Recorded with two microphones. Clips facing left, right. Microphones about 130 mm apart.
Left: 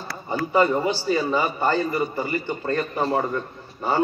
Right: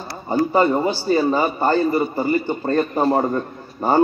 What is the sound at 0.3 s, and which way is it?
A man's voice, 35° right (ahead or behind).